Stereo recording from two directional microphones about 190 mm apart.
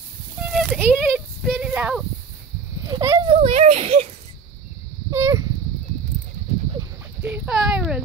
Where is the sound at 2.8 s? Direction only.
20° right (ahead or behind).